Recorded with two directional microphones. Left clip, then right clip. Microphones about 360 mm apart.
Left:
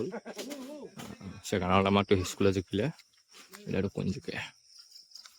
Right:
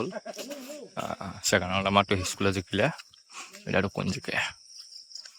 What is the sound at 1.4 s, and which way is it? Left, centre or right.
Speech, centre.